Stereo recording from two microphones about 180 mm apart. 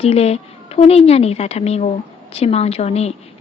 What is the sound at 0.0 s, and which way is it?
A woman's voice, 35° left (ahead or behind).